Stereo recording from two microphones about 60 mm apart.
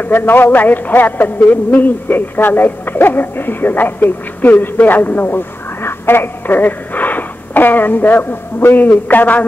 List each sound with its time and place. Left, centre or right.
0.0 s speech: left